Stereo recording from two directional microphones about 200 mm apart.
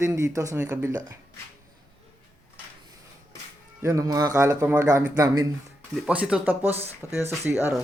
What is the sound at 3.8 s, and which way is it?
Speech, 15° right (ahead or behind).